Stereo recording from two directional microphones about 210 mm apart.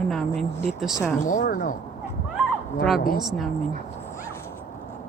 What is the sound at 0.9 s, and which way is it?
Speech, 15° left (ahead or behind).